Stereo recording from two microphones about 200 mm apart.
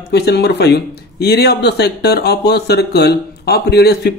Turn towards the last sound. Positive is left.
turn(degrees=55)  # may be behind; listen again after turning